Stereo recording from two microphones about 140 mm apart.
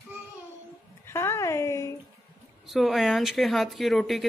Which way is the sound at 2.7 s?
Centre (ahead or behind).